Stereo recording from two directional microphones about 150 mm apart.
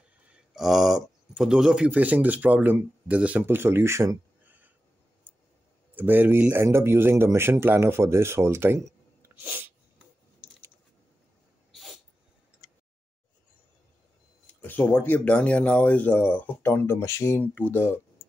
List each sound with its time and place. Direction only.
0.3 s speech: centre (ahead or behind)
5.9 s speech: 10° right (ahead or behind)
11.7 s sneeze: centre (ahead or behind)
14.5 s speech: 10° left (ahead or behind)